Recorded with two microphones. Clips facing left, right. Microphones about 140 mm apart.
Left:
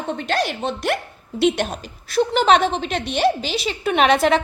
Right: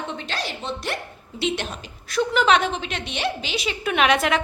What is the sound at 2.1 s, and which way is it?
A woman's voice, 35° left (ahead or behind).